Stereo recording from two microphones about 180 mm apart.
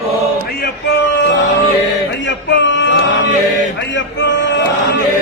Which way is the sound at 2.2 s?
90° left.